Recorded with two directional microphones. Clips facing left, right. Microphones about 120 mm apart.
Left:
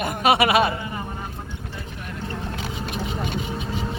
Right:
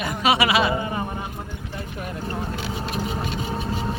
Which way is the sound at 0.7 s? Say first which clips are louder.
Right 5 dB; 30° right (ahead or behind).